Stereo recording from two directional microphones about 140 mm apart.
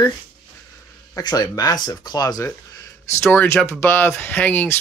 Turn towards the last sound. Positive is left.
turn(degrees=10)  # may be behind; listen again after turning